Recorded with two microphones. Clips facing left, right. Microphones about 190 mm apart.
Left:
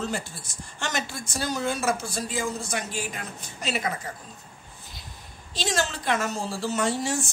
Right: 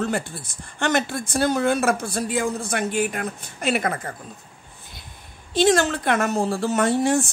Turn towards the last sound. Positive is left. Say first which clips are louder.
# right 7 dB
turn(degrees=-55)  # may be behind; listen again after turning